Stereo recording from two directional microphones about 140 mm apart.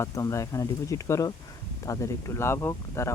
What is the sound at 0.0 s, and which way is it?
Speech, 20° left (ahead or behind).